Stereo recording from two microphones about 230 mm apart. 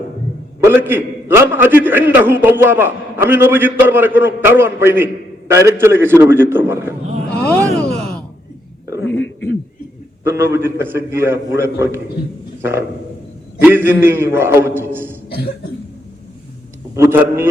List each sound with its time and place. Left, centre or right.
0.6 s a man's voice: centre
7.4 s groan: centre
9.0 s a sound: left
10.2 s a man's voice: centre
13.6 s a man's voice: centre
16.9 s a man's voice: centre